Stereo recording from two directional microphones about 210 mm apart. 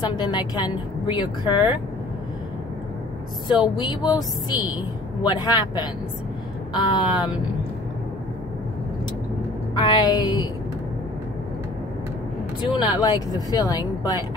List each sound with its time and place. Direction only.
0.0 s a woman's voice: 20° left (ahead or behind)
3.4 s a woman's voice: 20° left (ahead or behind)
9.8 s a woman's voice: 20° left (ahead or behind)
12.7 s a woman's voice: 20° left (ahead or behind)